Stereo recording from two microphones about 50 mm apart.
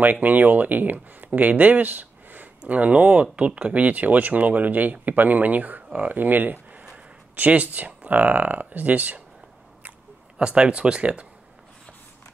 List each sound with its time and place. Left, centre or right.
0.0 s speech: right
10.4 s speech: right